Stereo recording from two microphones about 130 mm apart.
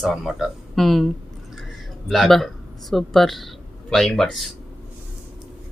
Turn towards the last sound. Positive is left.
turn(degrees=5)  # may be behind; listen again after turning